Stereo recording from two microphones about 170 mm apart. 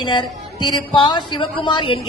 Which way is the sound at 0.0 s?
30° left (ahead or behind).